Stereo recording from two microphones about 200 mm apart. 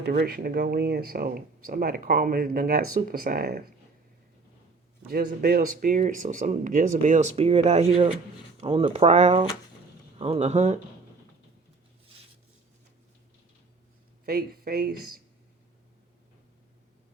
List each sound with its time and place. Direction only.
0.0 s speech: 50° right (ahead or behind)
5.0 s speech: 50° right (ahead or behind); by 10.8 s 35° right (ahead or behind)
14.3 s speech: 50° right (ahead or behind)